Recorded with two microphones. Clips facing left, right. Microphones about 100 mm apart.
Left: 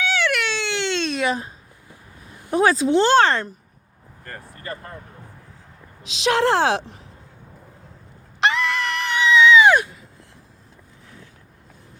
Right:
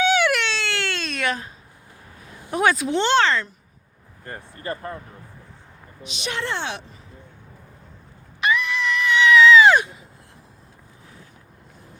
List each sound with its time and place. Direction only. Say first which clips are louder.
0.0 s baby cry: right 5 dB; 20° right (ahead or behind)
0.4 s baby cry: left 2 dB; 15° left (ahead or behind)
1.2 s a sound: even; 30° left (ahead or behind)
2.6 s speech: left 4 dB; 30° left (ahead or behind); by 3.5 s 45° left (ahead or behind)
4.2 s speech: right 2 dB; 20° right (ahead or behind)
6.1 s a woman's voice: left 10 dB; 90° left
8.4 s a sound: left 2 dB; 85° left
9.2 s screaming: right 1 dB; 20° left (ahead or behind)